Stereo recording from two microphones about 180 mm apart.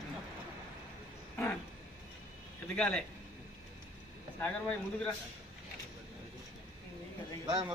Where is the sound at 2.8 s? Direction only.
5° left (ahead or behind).